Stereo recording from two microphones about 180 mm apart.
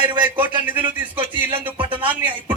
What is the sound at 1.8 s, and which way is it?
Speech, 30° right (ahead or behind).